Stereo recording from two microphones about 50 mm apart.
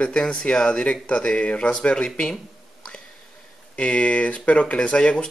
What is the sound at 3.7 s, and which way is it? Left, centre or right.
Speech, left.